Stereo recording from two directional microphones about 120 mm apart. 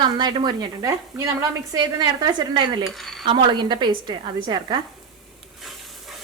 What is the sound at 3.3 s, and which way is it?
Speech, 40° right (ahead or behind).